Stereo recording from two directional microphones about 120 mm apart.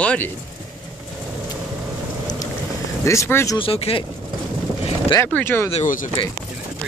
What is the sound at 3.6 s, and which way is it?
Speech, 55° left (ahead or behind).